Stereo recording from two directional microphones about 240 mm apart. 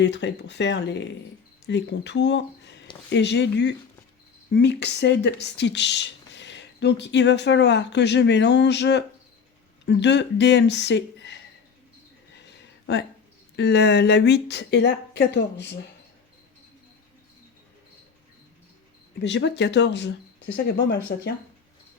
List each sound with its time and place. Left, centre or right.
0.0 s speech: left
12.9 s speech: left
19.2 s speech: left